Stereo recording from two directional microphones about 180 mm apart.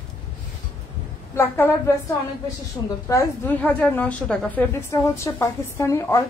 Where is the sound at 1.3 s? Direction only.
15° left (ahead or behind).